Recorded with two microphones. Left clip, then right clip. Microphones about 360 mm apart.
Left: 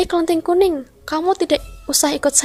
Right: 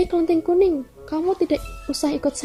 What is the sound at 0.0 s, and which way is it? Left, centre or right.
Speech, left.